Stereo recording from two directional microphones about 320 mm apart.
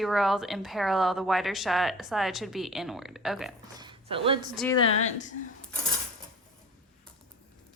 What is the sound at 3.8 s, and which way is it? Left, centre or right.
Speech, centre.